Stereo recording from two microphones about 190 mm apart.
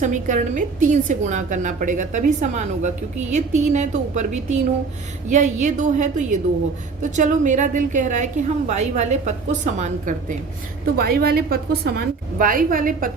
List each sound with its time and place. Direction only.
0.0 s a woman's voice: 40° right (ahead or behind)
10.9 s a woman's voice: 55° right (ahead or behind)